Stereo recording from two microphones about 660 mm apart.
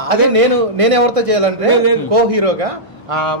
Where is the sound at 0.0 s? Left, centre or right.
Right.